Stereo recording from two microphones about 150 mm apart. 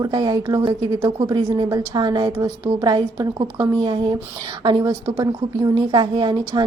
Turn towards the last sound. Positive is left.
turn(degrees=-30)  # may be behind; listen again after turning